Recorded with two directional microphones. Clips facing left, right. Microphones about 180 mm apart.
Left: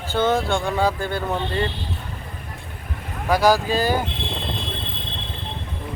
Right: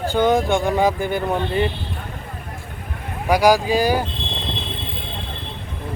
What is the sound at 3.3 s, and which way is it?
Speech, 15° right (ahead or behind).